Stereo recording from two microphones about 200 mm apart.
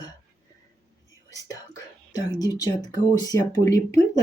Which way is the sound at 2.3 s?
20° left (ahead or behind).